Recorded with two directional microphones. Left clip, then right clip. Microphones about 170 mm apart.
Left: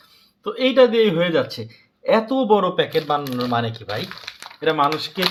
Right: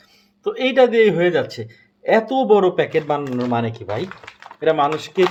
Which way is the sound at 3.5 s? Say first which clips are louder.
Even; 65° right (ahead or behind).